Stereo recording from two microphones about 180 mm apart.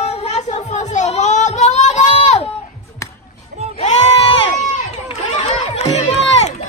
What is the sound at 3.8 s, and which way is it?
Sheep, 35° left (ahead or behind).